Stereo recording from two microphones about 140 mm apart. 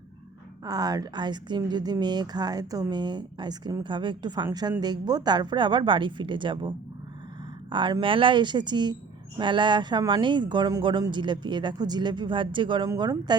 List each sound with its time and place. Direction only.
0.6 s a woman's voice: 25° right (ahead or behind)